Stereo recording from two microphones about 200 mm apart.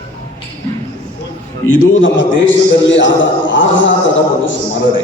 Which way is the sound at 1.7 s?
80° left.